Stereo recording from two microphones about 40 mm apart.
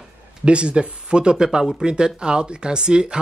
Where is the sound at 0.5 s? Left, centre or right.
Right.